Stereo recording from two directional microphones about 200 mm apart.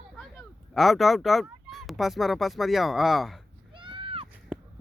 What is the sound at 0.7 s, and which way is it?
Speech, centre (ahead or behind).